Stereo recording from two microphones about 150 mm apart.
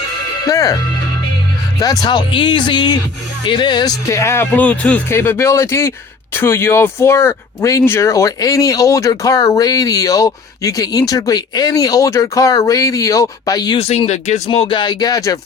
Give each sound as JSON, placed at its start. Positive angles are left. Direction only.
{"t": 0.4, "sound": "speech", "side_deg": 25}
{"t": 1.8, "sound": "speech", "side_deg": 25}
{"t": 13.7, "sound": "speech", "side_deg": 40}
{"t": 14.5, "sound": "speech", "side_deg": 35}